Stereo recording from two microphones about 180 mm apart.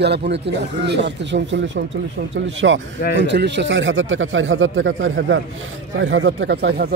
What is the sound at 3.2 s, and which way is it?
Speech, 75° right (ahead or behind).